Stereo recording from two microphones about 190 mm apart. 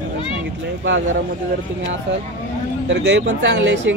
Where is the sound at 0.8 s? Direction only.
85° right.